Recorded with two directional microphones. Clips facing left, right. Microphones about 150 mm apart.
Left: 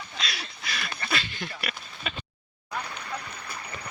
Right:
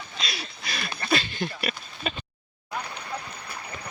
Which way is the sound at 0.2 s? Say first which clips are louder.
Right 1 dB; 25° right (ahead or behind).